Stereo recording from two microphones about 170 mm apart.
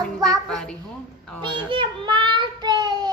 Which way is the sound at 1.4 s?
30° right (ahead or behind).